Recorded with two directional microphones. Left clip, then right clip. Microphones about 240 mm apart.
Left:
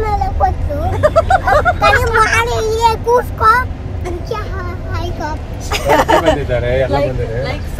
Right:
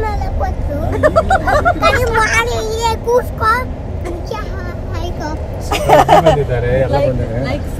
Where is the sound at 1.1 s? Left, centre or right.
Centre.